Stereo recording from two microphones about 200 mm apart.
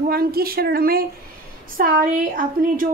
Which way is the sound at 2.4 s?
45° right (ahead or behind).